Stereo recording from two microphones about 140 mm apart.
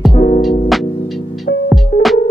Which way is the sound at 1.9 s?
90° left.